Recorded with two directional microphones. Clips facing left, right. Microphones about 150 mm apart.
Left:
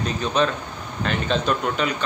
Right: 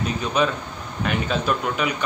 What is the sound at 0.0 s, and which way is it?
A man's voice, 10° right (ahead or behind).